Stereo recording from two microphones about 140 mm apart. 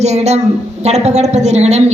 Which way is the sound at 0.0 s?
50° right (ahead or behind).